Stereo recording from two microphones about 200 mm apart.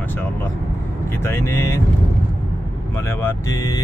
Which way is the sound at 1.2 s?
15° left (ahead or behind).